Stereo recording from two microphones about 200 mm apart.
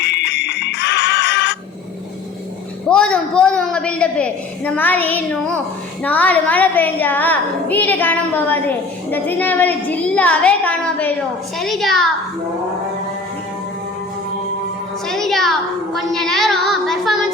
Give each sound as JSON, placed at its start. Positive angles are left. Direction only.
{"t": 0.0, "sound": "music", "side_deg": 60}
{"t": 2.9, "sound": "a sound", "side_deg": 5}
{"t": 6.0, "sound": "a child's voice", "side_deg": 10}
{"t": 15.0, "sound": "a woman's voice", "side_deg": 0}
{"t": 16.0, "sound": "child singing", "side_deg": 0}